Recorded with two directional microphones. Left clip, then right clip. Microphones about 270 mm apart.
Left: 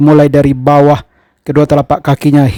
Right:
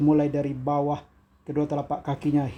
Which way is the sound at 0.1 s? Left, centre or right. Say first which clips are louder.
Left 16 dB; left.